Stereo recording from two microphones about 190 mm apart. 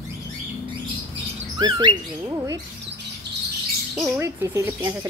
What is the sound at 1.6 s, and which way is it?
Chirp, 20° right (ahead or behind).